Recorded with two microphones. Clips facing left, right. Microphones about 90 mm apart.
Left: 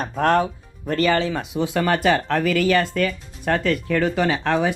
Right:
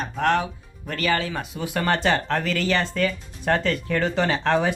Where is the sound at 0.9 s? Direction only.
30° left (ahead or behind).